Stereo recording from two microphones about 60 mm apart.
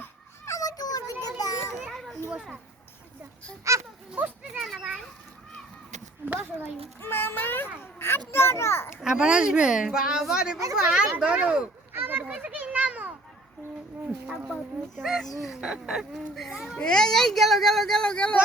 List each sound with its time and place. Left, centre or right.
0.5 s a sound: left
1.9 s children playing: centre
3.6 s speech: right
4.1 s a sound: centre
4.6 s children playing: centre
6.2 s speech: right
7.0 s a child's voice: left
8.9 s a woman's voice: centre
11.9 s children playing: right
15.0 s speech: centre
16.5 s a woman's voice: centre
16.7 s speech: centre
18.0 s speech: centre